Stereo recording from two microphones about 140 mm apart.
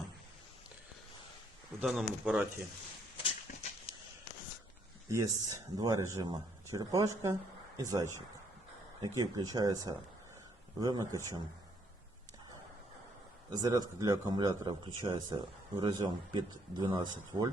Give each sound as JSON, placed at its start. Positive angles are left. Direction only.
{"t": 1.8, "sound": "speech", "side_deg": -5}
{"t": 3.2, "sound": "dog", "side_deg": 45}
{"t": 5.0, "sound": "speech", "side_deg": -25}
{"t": 13.5, "sound": "speech", "side_deg": -25}